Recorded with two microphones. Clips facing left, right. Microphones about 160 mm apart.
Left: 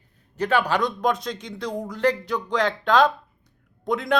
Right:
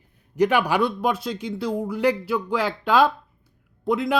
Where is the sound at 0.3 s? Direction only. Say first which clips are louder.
Right 3 dB; 10° right (ahead or behind).